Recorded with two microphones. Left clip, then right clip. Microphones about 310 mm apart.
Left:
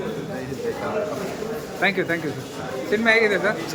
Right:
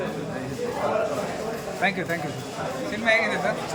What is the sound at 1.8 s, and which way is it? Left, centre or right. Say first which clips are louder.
Speech: left 4 dB; centre.